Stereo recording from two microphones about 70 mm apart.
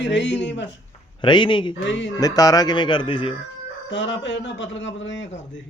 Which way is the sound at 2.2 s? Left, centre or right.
Left.